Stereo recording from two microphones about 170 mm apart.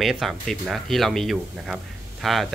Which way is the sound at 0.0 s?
Centre (ahead or behind).